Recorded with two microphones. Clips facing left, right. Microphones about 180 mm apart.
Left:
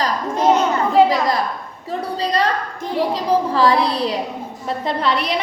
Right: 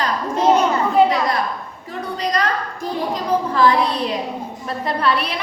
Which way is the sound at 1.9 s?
30° left (ahead or behind).